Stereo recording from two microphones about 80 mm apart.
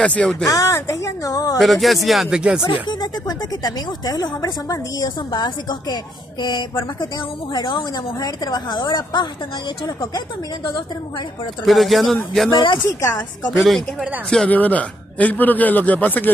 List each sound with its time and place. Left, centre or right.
0.0 s speech: centre
0.5 s a woman's voice: left
1.6 s speech: centre
2.3 s speech: centre
2.6 s speech: left
5.3 s speech: left
7.5 s speech: left
8.2 s speech: left
11.6 s speech: centre
12.4 s speech: left
13.5 s speech: centre
14.5 s a man's voice: centre